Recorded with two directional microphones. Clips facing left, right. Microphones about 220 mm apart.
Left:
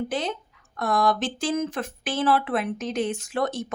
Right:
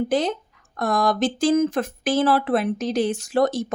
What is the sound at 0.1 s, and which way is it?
A woman's voice, 40° right (ahead or behind).